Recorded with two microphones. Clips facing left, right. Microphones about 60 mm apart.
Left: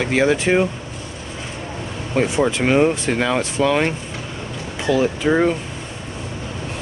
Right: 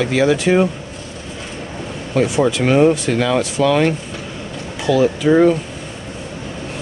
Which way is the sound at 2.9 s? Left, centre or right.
Left.